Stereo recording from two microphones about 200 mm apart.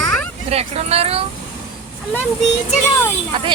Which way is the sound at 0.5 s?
30° right (ahead or behind).